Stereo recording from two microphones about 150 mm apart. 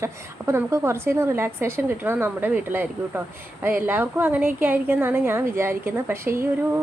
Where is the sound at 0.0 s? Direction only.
20° right (ahead or behind).